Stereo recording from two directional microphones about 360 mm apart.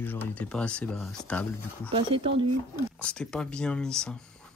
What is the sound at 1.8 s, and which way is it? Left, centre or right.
Speech, centre.